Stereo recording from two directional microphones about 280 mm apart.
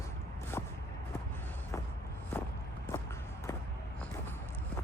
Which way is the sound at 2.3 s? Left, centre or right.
Centre.